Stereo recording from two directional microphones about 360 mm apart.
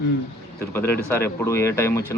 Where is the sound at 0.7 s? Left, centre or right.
Centre.